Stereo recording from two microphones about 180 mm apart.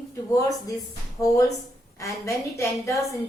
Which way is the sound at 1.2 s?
20° left (ahead or behind).